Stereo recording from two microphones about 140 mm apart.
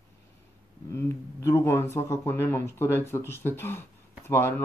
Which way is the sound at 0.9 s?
20° left (ahead or behind).